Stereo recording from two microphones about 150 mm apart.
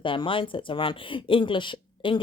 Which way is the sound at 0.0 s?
35° left (ahead or behind).